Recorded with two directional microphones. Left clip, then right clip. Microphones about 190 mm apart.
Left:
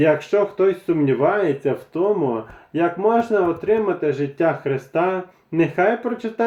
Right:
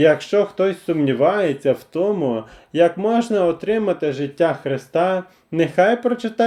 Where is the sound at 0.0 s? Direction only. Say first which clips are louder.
Right 2 dB; 35° right (ahead or behind).